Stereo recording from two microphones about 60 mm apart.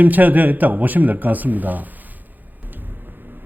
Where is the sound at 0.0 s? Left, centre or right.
Right.